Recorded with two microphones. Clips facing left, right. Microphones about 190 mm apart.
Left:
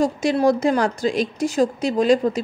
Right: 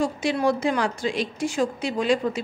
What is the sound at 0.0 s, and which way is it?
A woman's voice, 40° left (ahead or behind).